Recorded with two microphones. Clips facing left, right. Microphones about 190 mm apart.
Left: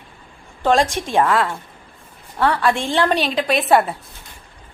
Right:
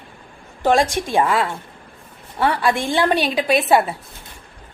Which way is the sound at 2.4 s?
15° right (ahead or behind).